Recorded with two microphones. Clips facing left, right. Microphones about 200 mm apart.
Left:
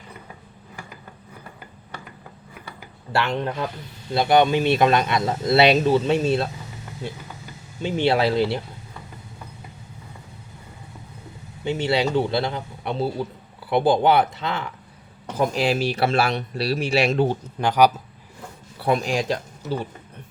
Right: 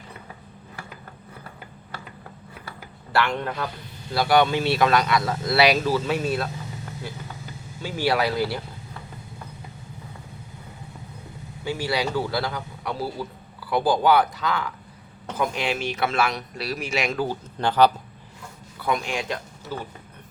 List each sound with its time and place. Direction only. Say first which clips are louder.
3.1 s speech: left 1 dB; 25° left (ahead or behind)
7.8 s speech: left 3 dB; 25° left (ahead or behind)
11.6 s speech: left 4 dB; 25° left (ahead or behind)
17.6 s speech: left 1 dB; 10° left (ahead or behind)
18.8 s speech: left 4 dB; 35° left (ahead or behind)